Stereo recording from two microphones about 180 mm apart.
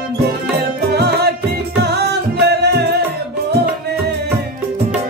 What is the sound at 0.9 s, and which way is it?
Music, 65° right (ahead or behind).